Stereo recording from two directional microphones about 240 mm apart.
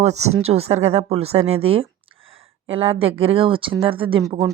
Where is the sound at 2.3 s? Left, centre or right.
Right.